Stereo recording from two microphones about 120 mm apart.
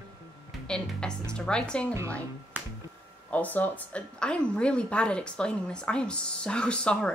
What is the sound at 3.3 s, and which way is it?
A woman's voice, 15° left (ahead or behind).